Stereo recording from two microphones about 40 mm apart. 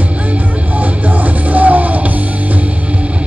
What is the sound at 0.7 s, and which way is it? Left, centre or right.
Music, right.